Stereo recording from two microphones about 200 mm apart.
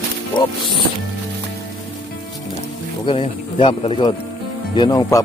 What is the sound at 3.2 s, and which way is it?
Speech, 30° left (ahead or behind).